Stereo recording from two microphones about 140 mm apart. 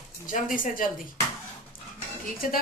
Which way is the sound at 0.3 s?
75° left (ahead or behind).